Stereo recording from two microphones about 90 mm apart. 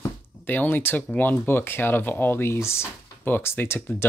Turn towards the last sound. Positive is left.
turn(degrees=25)  # may be behind; listen again after turning